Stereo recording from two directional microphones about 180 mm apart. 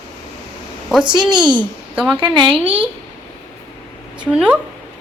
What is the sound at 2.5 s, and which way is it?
Speech, 30° right (ahead or behind).